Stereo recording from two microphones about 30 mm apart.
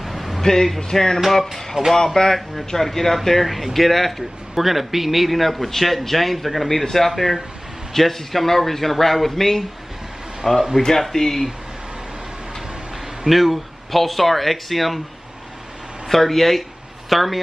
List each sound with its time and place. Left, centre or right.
0.0 s a sound: centre
0.4 s speech: centre
0.7 s music: left
1.2 s speech: centre
2.2 s music: left
2.7 s speech: centre
4.6 s speech: centre
10.4 s speech: centre
11.1 s speech: centre
13.2 s speech: centre
16.1 s speech: centre